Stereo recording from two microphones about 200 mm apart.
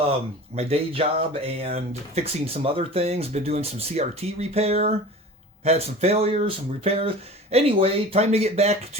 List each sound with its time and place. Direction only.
0.5 s speech: 30° right (ahead or behind)